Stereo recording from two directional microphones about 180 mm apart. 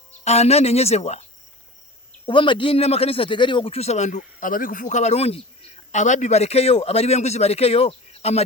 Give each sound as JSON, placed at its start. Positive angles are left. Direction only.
{"t": 0.3, "sound": "speech", "side_deg": 35}
{"t": 2.2, "sound": "speech", "side_deg": 30}